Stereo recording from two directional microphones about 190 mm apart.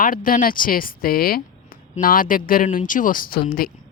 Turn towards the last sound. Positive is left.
turn(degrees=50)  # may be behind; listen again after turning